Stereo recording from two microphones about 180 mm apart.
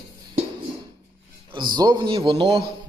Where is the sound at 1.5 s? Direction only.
25° right (ahead or behind).